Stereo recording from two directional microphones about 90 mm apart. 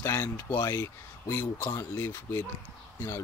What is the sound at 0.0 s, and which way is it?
Speech, 30° left (ahead or behind).